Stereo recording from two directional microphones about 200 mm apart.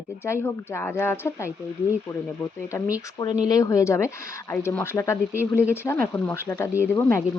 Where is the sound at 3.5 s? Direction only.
15° left (ahead or behind).